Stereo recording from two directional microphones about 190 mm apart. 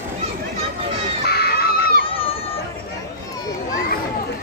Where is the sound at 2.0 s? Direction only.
30° left (ahead or behind).